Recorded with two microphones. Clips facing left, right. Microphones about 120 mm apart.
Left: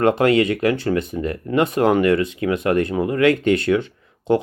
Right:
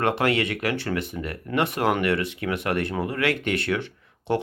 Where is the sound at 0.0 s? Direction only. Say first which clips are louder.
Left 7 dB; 30° left (ahead or behind).